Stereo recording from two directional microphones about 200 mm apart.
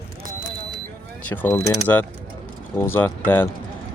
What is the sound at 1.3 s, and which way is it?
Speech, 10° left (ahead or behind).